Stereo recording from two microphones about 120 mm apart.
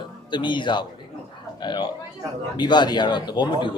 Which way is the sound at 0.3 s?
40° left (ahead or behind).